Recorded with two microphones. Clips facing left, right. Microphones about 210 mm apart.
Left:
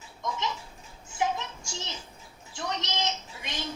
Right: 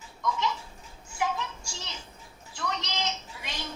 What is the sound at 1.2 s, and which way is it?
Music, 20° left (ahead or behind).